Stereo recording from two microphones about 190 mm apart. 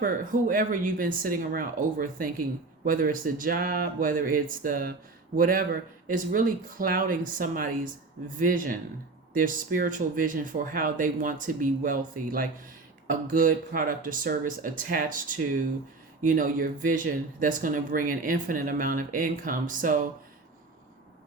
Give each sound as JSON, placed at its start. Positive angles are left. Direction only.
{"t": 0.0, "sound": "speech", "side_deg": -45}
{"t": 16.2, "sound": "speech", "side_deg": -45}